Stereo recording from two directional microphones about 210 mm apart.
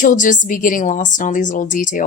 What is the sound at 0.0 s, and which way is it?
Speech, 40° left (ahead or behind).